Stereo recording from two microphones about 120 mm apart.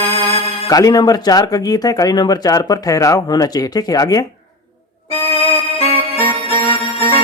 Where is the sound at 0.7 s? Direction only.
30° left (ahead or behind).